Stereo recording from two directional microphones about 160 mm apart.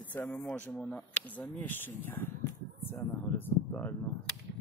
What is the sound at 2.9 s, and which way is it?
Speech, 10° left (ahead or behind).